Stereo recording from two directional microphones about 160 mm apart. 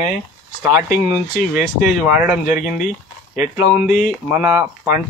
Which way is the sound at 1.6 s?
5° right (ahead or behind).